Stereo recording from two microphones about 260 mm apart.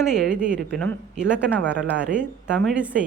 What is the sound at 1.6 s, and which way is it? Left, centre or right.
Speech, right.